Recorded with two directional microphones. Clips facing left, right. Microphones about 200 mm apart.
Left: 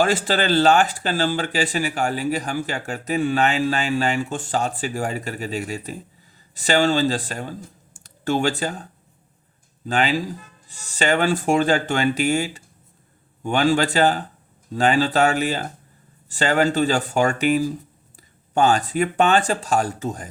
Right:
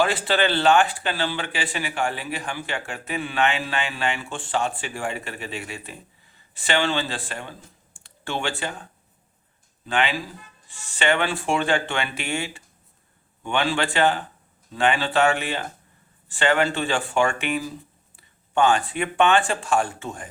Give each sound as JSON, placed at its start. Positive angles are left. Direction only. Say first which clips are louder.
{"t": 0.0, "sound": "speech", "louder": "left 2 dB", "side_deg": 45}